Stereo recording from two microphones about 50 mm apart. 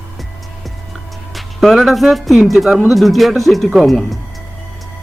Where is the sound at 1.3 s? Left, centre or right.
Centre.